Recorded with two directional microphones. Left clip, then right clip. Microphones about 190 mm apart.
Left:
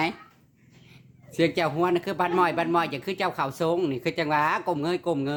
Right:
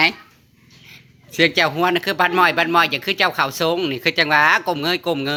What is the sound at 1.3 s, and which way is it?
Speech, centre (ahead or behind).